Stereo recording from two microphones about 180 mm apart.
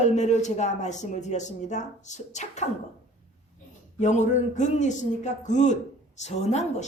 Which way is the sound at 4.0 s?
40° left (ahead or behind).